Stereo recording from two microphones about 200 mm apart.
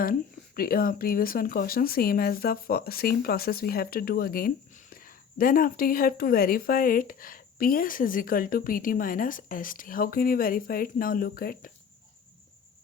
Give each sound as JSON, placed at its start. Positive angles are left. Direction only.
{"t": 0.0, "sound": "speech", "side_deg": 45}